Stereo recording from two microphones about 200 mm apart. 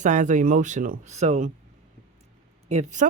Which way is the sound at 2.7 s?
35° right (ahead or behind).